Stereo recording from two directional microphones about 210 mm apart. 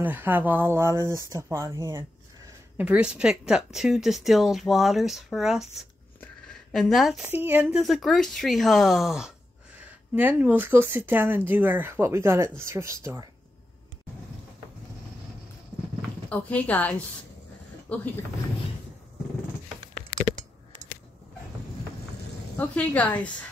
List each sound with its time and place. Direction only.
0.0 s speech: 10° right (ahead or behind)
2.8 s speech: 5° right (ahead or behind)
16.3 s a woman's voice: 5° left (ahead or behind)
22.6 s a woman's voice: 5° left (ahead or behind)